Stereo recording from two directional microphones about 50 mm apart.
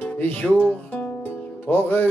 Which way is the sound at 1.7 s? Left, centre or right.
Left.